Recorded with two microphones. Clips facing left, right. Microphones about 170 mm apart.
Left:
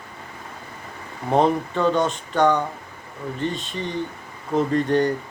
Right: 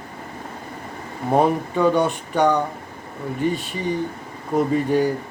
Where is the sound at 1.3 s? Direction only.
10° right (ahead or behind).